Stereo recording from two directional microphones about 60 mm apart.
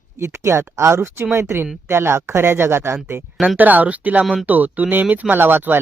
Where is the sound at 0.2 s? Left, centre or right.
Right.